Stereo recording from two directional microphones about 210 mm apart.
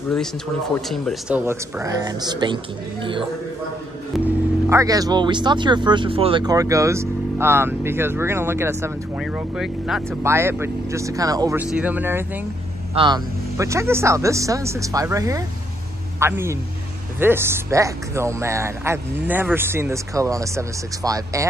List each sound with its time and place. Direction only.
0.7 s speech: centre (ahead or behind)
1.4 s speech: 15° right (ahead or behind)
4.6 s speech: 15° right (ahead or behind)
12.9 s speech: 20° right (ahead or behind)